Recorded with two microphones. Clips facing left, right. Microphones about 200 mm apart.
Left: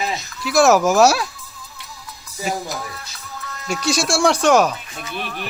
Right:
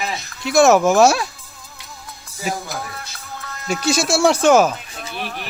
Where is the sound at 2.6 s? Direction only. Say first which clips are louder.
Even; 50° right (ahead or behind).